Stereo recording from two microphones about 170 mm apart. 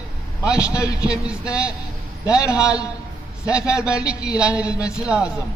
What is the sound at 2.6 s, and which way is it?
Speech, 20° left (ahead or behind).